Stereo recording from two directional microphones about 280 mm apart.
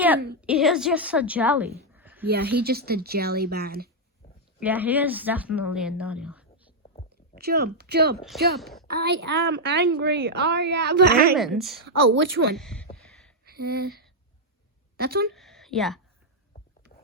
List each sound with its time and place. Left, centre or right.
0.4 s speech: centre
1.9 s a sound: centre
2.3 s a woman's voice: right
4.6 s speech: centre
7.3 s a woman's voice: right
8.5 s a woman's voice: centre
8.9 s a woman's voice: right
11.3 s speech: centre
11.9 s a woman's voice: right
12.5 s a sound: centre
13.4 s a sound: right
14.9 s speech: right
15.4 s a sound: centre